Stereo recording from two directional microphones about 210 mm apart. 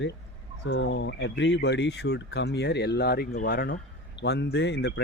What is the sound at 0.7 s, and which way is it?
Speech, 55° left (ahead or behind).